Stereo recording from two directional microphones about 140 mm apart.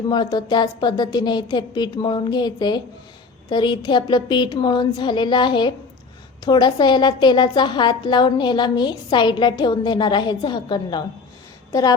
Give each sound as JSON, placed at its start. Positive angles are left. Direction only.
{"t": 0.1, "sound": "a woman's voice", "side_deg": 30}